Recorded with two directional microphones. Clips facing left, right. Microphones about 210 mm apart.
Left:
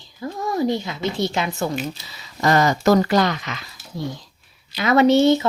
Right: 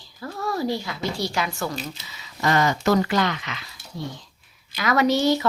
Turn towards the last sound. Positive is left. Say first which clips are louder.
# left 5 dB
turn(degrees=25)  # may be behind; listen again after turning